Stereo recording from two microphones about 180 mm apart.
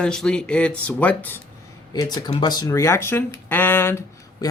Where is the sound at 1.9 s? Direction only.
20° left (ahead or behind).